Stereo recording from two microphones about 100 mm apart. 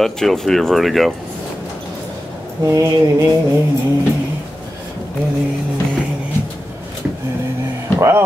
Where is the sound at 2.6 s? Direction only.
30° right (ahead or behind).